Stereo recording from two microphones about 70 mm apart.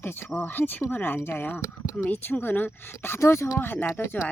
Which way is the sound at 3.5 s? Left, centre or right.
Left.